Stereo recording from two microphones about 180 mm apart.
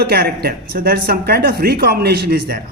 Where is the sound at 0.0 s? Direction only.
60° right (ahead or behind).